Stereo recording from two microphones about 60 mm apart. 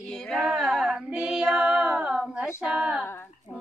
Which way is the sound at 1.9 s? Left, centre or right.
Right.